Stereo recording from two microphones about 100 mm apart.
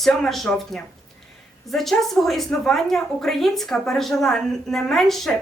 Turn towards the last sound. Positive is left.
turn(degrees=5)  # may be behind; listen again after turning